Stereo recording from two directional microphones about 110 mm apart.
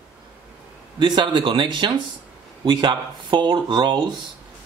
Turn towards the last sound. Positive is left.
turn(degrees=-45)  # may be behind; listen again after turning